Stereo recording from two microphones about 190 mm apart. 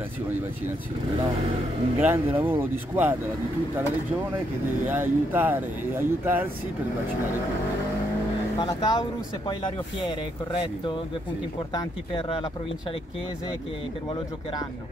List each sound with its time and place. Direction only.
2.0 s speech: 10° right (ahead or behind)
4.8 s speech: 10° right (ahead or behind)
8.5 s speech: 20° left (ahead or behind)
11.7 s speech: 25° left (ahead or behind)